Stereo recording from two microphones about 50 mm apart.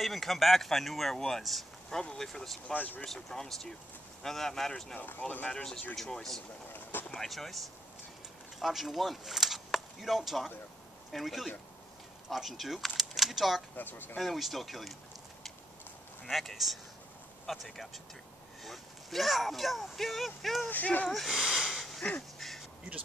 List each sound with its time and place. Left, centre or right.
0.0 s speech: centre
2.7 s speech: left
3.1 s speech: centre
4.9 s speech: left
5.5 s speech: centre
6.7 s vehicle: left
7.2 s speech: centre
13.7 s speech: left
14.1 s speech: centre
16.3 s speech: centre
20.6 s speech: left
21.1 s a sound: centre
22.4 s duck: centre